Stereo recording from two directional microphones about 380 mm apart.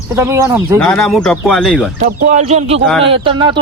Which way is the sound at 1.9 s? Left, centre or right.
Centre.